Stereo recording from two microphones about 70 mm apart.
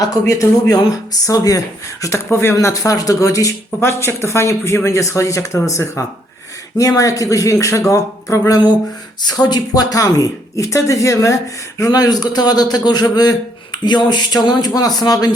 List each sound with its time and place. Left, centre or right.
0.0 s speech: left
2.7 s speech: left
3.8 s speech: left
6.7 s speech: left
9.2 s speech: left
11.8 s a man's voice: left